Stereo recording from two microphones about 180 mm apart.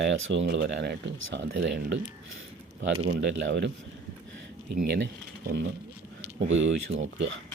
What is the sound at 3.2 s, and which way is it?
Speech, 85° right.